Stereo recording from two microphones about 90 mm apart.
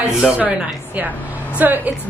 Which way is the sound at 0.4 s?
15° right (ahead or behind).